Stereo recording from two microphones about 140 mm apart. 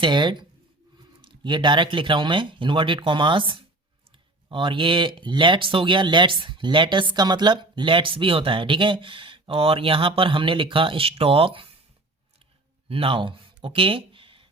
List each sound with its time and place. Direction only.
0.0 s speech: 35° right (ahead or behind)
12.9 s speech: 40° right (ahead or behind)